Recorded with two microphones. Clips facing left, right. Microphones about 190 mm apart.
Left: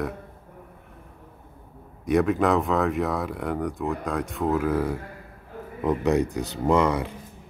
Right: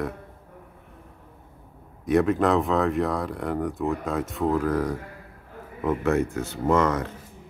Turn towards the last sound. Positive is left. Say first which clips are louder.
# left 1 dB
turn(degrees=15)  # may be behind; listen again after turning